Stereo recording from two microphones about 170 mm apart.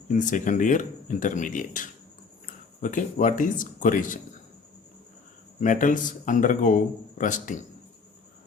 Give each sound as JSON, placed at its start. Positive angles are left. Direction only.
{"t": 0.1, "sound": "speech", "side_deg": 50}
{"t": 5.5, "sound": "speech", "side_deg": 50}